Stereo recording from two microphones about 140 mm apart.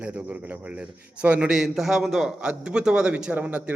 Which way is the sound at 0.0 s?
10° right (ahead or behind).